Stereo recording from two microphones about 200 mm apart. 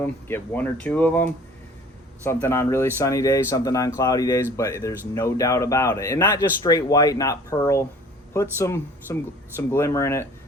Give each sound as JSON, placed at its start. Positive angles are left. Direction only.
{"t": 0.0, "sound": "speech", "side_deg": 10}